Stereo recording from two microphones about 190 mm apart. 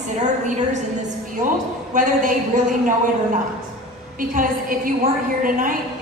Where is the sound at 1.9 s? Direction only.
45° right (ahead or behind).